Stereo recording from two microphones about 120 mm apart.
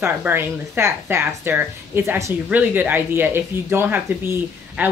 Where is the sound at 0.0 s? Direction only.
20° right (ahead or behind).